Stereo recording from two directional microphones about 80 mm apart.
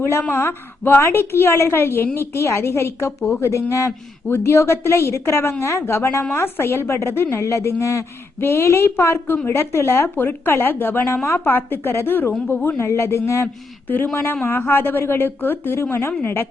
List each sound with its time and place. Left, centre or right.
0.0 s a woman's voice: left
13.8 s a woman's voice: left